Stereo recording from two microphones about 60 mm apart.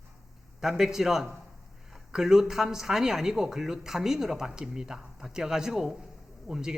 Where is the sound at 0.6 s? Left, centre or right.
Centre.